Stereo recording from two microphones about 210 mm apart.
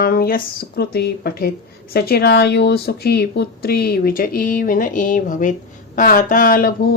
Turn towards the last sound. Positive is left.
turn(degrees=45)  # may be behind; listen again after turning